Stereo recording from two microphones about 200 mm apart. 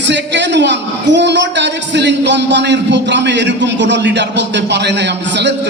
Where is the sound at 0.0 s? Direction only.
60° right (ahead or behind).